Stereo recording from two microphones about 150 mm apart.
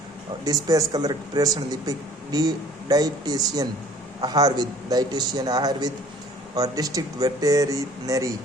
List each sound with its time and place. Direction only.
0.4 s speech: 25° right (ahead or behind)